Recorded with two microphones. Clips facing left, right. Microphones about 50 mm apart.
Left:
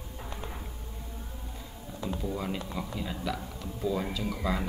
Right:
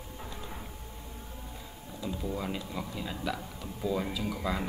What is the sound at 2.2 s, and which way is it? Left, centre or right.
Speech, centre.